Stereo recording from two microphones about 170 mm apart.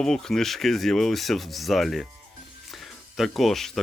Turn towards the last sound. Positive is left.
turn(degrees=0)  # may be behind; listen again after turning